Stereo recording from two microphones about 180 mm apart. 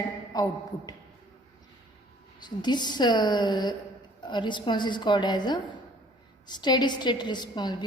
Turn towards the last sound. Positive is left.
turn(degrees=25)  # may be behind; listen again after turning